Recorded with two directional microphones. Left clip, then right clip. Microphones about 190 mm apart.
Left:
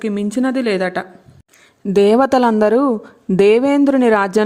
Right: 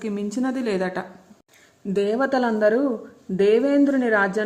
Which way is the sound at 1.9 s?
55° left (ahead or behind).